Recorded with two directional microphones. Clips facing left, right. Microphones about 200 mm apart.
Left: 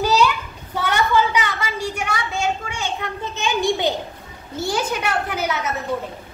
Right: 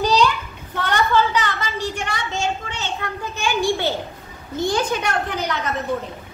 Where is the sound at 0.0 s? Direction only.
5° left (ahead or behind).